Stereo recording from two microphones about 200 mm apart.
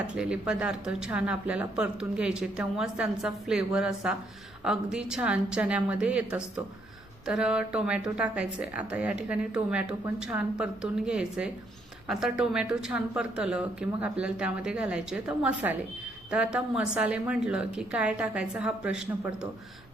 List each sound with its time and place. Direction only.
0.1 s speech: 5° right (ahead or behind)